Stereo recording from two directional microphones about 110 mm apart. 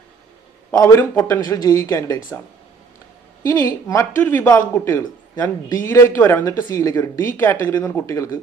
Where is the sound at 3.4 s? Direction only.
30° left (ahead or behind).